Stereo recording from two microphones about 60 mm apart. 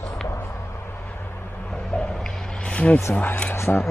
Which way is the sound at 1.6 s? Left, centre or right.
Centre.